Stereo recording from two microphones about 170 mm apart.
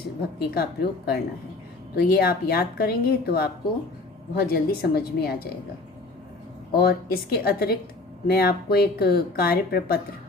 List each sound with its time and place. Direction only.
0.2 s a woman's voice: 65° left (ahead or behind)
6.7 s speech: 65° left (ahead or behind)